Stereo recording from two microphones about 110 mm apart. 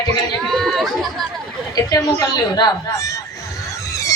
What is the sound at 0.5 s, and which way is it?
Speech, centre (ahead or behind).